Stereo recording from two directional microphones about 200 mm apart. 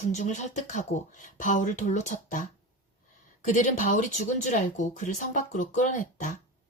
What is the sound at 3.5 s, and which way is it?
A woman's voice, 40° left (ahead or behind).